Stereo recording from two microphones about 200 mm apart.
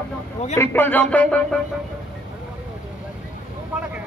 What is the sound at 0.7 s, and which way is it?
Speech, 10° left (ahead or behind).